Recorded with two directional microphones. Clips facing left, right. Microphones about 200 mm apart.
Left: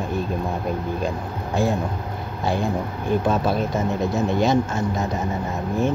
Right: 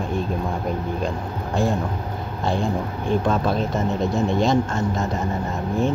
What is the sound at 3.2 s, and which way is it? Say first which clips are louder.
Speech: left 1 dB; 5° left (ahead or behind).